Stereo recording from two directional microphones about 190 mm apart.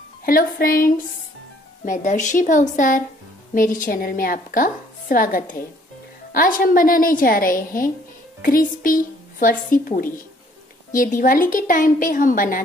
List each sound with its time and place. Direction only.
0.2 s a woman's voice: 50° left (ahead or behind)